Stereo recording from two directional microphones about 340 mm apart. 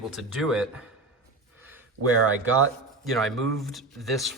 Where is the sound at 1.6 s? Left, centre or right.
Centre.